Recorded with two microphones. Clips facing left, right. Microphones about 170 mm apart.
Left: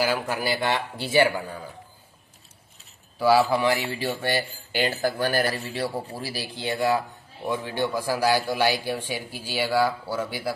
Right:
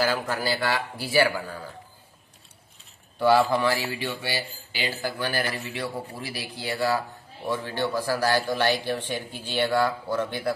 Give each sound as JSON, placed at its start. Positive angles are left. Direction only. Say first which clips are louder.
{"t": 0.0, "sound": "a man's voice", "louder": "even", "side_deg": 15}
{"t": 3.2, "sound": "speech", "louder": "left 1 dB", "side_deg": 5}
{"t": 4.0, "sound": "speech", "louder": "left 4 dB", "side_deg": 45}